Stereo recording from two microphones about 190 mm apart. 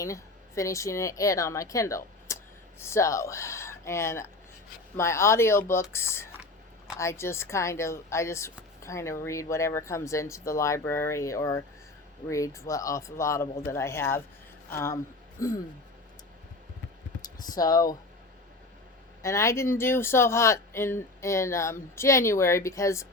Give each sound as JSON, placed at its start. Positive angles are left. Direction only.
{"t": 0.0, "sound": "a woman's voice", "side_deg": 15}
{"t": 17.5, "sound": "speech", "side_deg": 20}
{"t": 19.2, "sound": "speech", "side_deg": 15}